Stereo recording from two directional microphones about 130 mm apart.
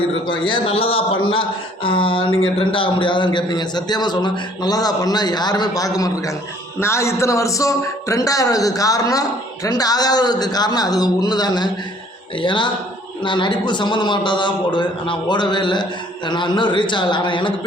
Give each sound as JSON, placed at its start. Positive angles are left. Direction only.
{"t": 0.3, "sound": "a man's voice", "side_deg": 40}